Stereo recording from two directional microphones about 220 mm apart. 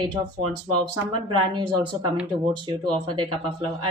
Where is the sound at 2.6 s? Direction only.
20° right (ahead or behind).